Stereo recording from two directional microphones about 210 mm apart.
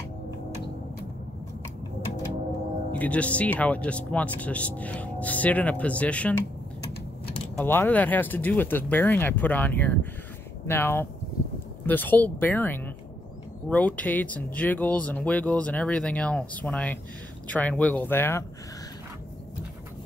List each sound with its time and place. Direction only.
2.9 s speech: 5° left (ahead or behind)
7.5 s speech: 10° left (ahead or behind)